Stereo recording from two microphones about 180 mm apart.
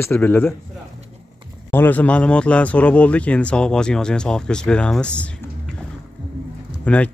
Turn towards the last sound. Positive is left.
turn(degrees=5)  # may be behind; listen again after turning